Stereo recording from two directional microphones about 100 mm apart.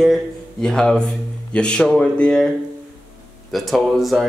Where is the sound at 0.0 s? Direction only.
Centre (ahead or behind).